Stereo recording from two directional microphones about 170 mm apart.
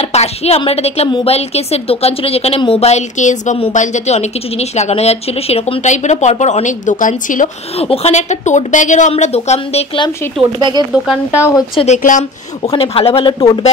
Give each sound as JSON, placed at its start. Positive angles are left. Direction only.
{"t": 0.0, "sound": "a woman's voice", "side_deg": 40}
{"t": 7.8, "sound": "a woman's voice", "side_deg": 35}
{"t": 10.6, "sound": "speech", "side_deg": -25}
{"t": 10.9, "sound": "speech", "side_deg": -5}
{"t": 11.7, "sound": "a woman's voice", "side_deg": 40}
{"t": 12.6, "sound": "a woman's voice", "side_deg": 35}